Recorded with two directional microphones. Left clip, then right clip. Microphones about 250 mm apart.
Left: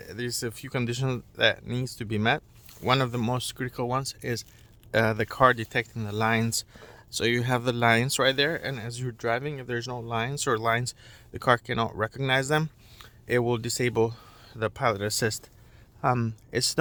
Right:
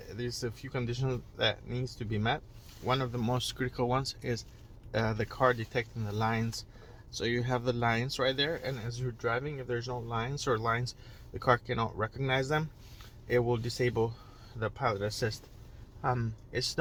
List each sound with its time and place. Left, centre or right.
0.0 s speech: left